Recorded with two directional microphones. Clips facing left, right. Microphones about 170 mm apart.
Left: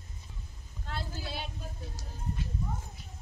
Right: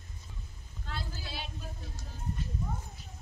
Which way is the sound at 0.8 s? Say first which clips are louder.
Left 3 dB; 55° left (ahead or behind).